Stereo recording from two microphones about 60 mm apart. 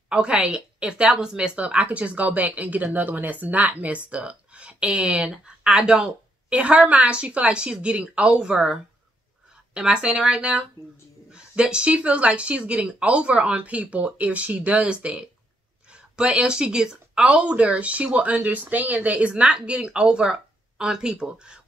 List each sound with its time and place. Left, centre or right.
0.1 s speech: centre
9.8 s speech: centre